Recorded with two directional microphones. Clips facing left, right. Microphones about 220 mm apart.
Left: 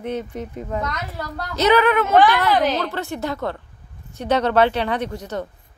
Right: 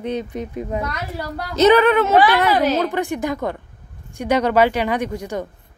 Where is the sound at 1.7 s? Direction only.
30° right (ahead or behind).